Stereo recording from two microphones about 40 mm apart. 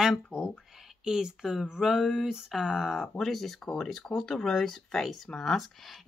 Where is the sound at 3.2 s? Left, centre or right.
Centre.